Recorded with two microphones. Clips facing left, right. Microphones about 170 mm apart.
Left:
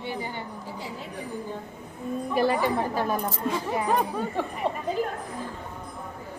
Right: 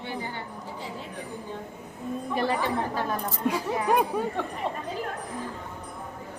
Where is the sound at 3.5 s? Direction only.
10° right (ahead or behind).